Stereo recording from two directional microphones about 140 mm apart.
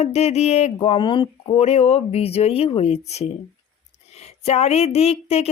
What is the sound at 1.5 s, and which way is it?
Speech, 50° left (ahead or behind).